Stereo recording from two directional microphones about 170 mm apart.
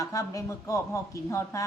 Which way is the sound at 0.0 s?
20° left (ahead or behind).